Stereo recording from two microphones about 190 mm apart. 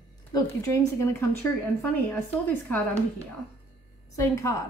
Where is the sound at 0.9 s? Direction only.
15° left (ahead or behind).